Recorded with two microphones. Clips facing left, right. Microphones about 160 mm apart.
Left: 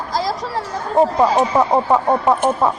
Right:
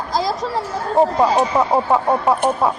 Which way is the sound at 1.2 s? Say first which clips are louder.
Left 1 dB; centre (ahead or behind).